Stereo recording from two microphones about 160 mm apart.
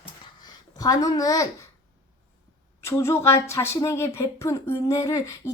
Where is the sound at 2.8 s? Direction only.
15° left (ahead or behind).